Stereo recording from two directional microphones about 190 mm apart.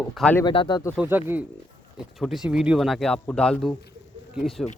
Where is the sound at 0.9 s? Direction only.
10° right (ahead or behind).